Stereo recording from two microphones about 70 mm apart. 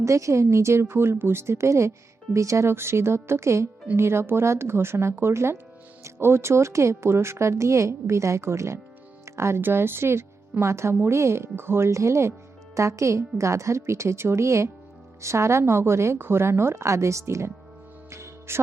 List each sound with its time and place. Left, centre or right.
0.0 s a woman's voice: right
18.1 s music: right